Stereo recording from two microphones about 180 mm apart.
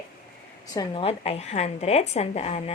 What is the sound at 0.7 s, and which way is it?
A woman's voice, 25° left (ahead or behind).